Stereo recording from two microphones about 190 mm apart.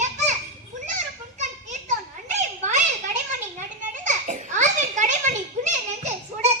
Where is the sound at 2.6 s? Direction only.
40° right (ahead or behind).